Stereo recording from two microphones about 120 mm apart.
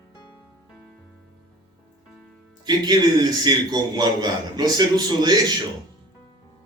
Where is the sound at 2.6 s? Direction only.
35° right (ahead or behind).